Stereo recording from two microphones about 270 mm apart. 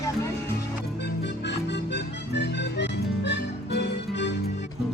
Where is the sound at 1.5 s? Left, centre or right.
Left.